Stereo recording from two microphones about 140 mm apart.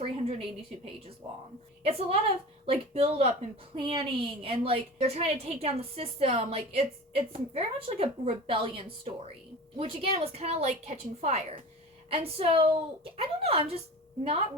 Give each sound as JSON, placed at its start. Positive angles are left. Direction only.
{"t": 0.0, "sound": "a sound", "side_deg": -40}
{"t": 1.8, "sound": "a woman's voice", "side_deg": -45}
{"t": 12.1, "sound": "a woman's voice", "side_deg": -40}